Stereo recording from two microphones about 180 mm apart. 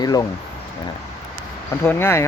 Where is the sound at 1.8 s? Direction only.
15° left (ahead or behind).